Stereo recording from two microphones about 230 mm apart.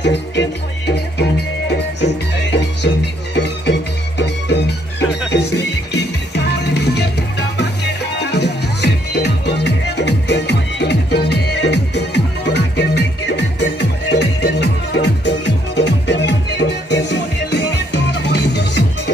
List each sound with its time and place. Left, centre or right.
0.0 s music: left